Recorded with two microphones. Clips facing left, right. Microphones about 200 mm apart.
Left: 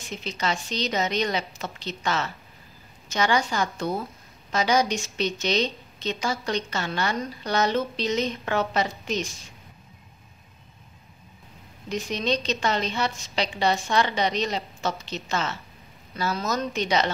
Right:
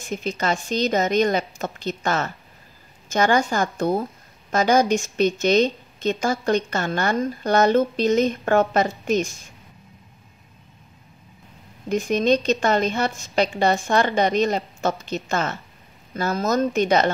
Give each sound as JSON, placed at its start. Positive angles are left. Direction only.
{"t": 0.0, "sound": "a woman's voice", "side_deg": -50}
{"t": 11.9, "sound": "a woman's voice", "side_deg": -50}